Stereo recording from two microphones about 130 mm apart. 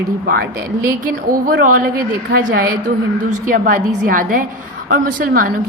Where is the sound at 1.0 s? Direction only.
90° right.